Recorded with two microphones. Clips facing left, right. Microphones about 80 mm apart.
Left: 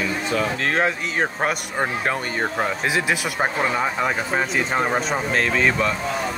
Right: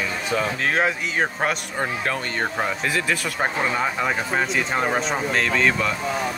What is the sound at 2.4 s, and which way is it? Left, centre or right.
Speech, centre.